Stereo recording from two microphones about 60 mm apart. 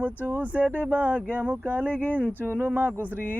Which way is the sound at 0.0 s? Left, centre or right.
Right.